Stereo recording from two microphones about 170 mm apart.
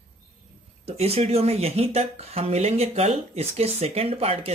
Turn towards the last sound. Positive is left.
turn(degrees=-35)  # may be behind; listen again after turning